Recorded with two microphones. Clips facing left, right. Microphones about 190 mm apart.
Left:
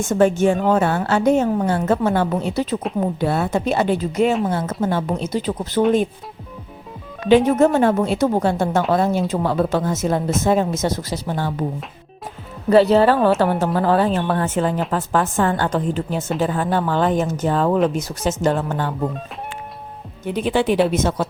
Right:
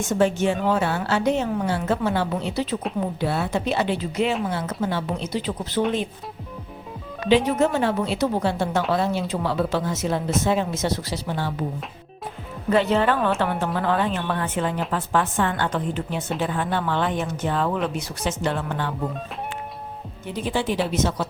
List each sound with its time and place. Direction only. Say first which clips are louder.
0.1 s a woman's voice: left 5 dB; 50° left (ahead or behind)
7.3 s a woman's voice: left 5 dB; 50° left (ahead or behind)
12.7 s a woman's voice: left 7 dB; 35° left (ahead or behind)
20.3 s speech: left 6 dB; 60° left (ahead or behind)
20.9 s a woman's voice: left 4 dB; 50° left (ahead or behind)